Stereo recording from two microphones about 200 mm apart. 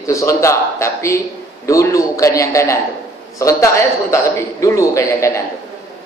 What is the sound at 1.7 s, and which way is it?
A man's voice, 15° left (ahead or behind).